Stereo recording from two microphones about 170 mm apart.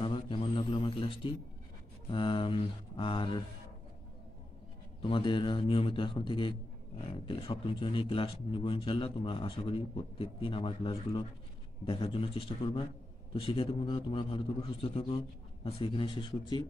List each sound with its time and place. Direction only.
0.0 s a sound: 30° left (ahead or behind)
2.0 s a man's voice: 30° left (ahead or behind)
5.0 s a man's voice: 30° left (ahead or behind)